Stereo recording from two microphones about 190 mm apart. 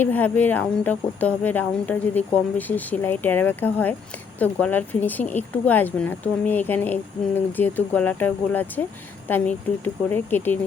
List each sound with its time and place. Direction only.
0.0 s speech: 10° left (ahead or behind)